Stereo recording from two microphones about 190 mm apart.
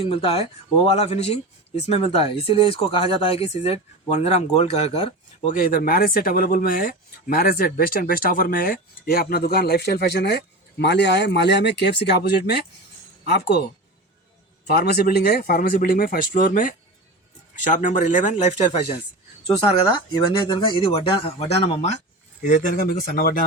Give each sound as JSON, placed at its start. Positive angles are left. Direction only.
{"t": 0.0, "sound": "speech", "side_deg": 30}
{"t": 5.5, "sound": "speech", "side_deg": 50}
{"t": 14.7, "sound": "speech", "side_deg": 55}
{"t": 20.5, "sound": "speech", "side_deg": 25}
{"t": 22.4, "sound": "speech", "side_deg": 45}